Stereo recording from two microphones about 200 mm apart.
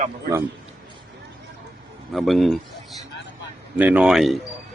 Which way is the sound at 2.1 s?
Centre (ahead or behind).